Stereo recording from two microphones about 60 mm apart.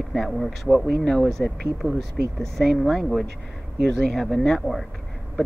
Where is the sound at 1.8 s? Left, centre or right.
Left.